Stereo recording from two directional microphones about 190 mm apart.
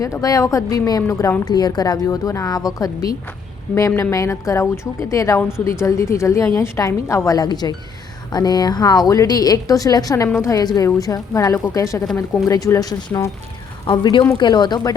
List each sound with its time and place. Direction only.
0.0 s a woman's voice: 20° left (ahead or behind)